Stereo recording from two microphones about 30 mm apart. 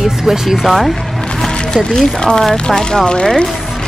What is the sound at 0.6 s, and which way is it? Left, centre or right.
Speech, centre.